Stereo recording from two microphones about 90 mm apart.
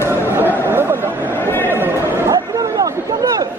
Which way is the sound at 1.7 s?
25° right (ahead or behind).